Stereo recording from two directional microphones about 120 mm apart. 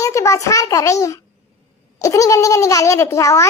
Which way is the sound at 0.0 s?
25° left (ahead or behind).